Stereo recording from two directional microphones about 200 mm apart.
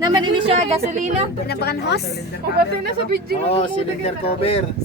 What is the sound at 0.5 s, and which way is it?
Speech, 35° right (ahead or behind).